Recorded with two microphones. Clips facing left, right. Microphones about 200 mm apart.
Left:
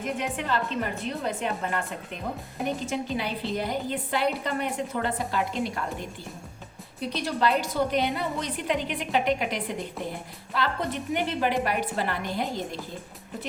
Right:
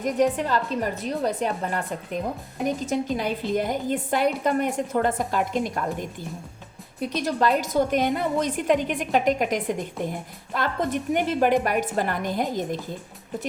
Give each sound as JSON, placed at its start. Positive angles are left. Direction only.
{"t": 0.0, "sound": "a woman's voice", "side_deg": -40}
{"t": 2.8, "sound": "a woman's voice", "side_deg": -45}
{"t": 7.0, "sound": "a woman's voice", "side_deg": -45}